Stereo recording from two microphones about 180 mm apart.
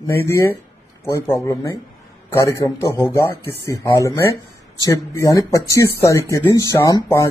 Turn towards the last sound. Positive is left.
turn(degrees=20)  # may be behind; listen again after turning